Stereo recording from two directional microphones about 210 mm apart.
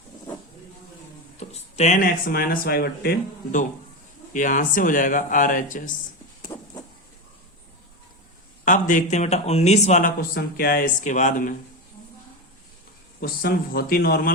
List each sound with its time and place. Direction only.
1.4 s speech: 30° left (ahead or behind)
6.5 s a sound: 15° left (ahead or behind)
8.6 s speech: 40° left (ahead or behind)
13.2 s speech: 45° left (ahead or behind)